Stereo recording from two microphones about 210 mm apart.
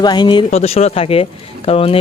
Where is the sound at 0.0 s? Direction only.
20° left (ahead or behind).